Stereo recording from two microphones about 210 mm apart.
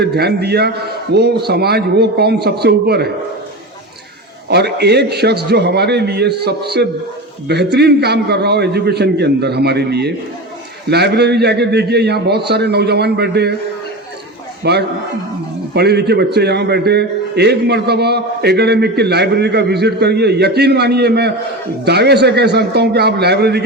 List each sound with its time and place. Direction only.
0.0 s a man's voice: 50° right (ahead or behind)
4.4 s a man's voice: 50° right (ahead or behind)
14.6 s a man's voice: 50° right (ahead or behind)